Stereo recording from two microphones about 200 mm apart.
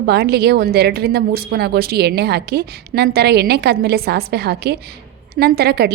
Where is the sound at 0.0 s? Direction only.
55° right (ahead or behind).